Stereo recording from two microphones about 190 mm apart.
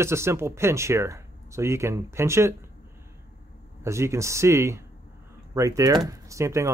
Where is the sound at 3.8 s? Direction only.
15° right (ahead or behind).